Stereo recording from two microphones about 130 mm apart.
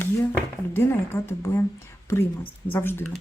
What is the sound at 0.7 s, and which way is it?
Speech, 20° left (ahead or behind).